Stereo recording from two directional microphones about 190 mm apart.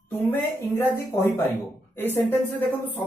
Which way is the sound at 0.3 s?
10° left (ahead or behind).